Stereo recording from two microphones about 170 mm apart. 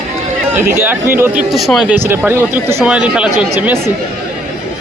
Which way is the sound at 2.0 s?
15° right (ahead or behind).